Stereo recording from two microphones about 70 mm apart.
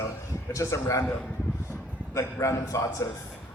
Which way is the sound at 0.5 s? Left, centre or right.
Left.